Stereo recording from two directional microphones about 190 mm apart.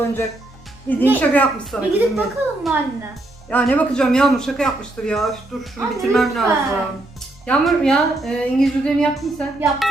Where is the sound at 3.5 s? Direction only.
5° left (ahead or behind).